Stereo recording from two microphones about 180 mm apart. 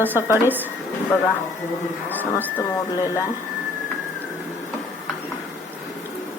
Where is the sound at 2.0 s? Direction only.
10° left (ahead or behind).